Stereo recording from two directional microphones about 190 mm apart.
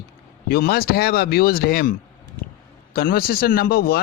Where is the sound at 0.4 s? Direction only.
55° left (ahead or behind).